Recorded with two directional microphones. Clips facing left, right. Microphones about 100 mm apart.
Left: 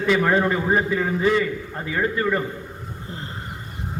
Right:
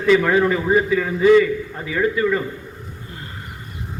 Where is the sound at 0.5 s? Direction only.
30° left (ahead or behind).